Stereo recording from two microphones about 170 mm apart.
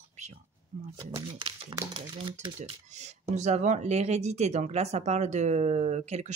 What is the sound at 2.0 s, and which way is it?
Speech, 30° right (ahead or behind).